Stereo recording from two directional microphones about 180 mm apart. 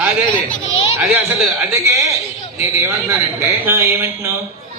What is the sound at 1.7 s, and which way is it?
A man's voice, 15° right (ahead or behind).